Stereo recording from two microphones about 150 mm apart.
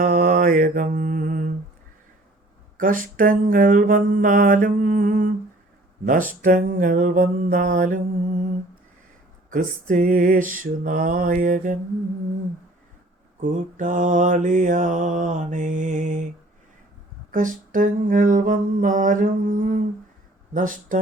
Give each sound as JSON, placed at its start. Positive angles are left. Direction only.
{"t": 0.0, "sound": "mantra", "side_deg": -70}
{"t": 2.7, "sound": "mantra", "side_deg": -65}
{"t": 6.4, "sound": "mantra", "side_deg": -65}
{"t": 9.5, "sound": "mantra", "side_deg": -60}
{"t": 13.4, "sound": "mantra", "side_deg": -60}
{"t": 17.3, "sound": "mantra", "side_deg": -60}